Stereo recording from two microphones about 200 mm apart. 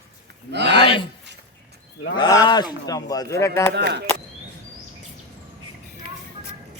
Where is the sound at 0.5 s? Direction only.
60° right (ahead or behind).